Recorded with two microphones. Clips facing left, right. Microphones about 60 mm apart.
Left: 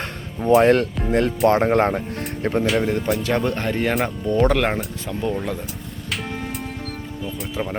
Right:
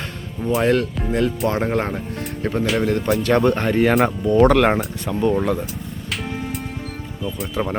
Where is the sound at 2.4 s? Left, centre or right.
Centre.